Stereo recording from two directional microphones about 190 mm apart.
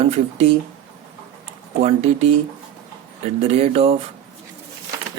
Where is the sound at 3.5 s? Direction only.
35° right (ahead or behind).